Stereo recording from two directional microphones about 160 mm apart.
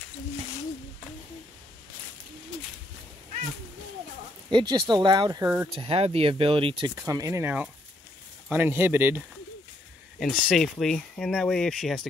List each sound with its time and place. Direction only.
4.5 s speech: 30° right (ahead or behind)
5.7 s speech: 35° right (ahead or behind)
7.0 s speech: 20° right (ahead or behind)
10.1 s speech: centre (ahead or behind)